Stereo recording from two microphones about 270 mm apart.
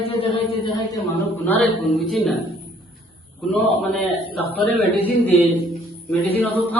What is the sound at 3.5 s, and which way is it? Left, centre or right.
Speech, centre.